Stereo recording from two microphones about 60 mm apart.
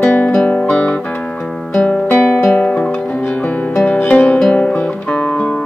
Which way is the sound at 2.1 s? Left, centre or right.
Left.